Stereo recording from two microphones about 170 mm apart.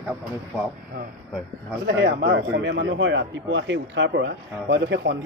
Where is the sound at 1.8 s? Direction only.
90° right.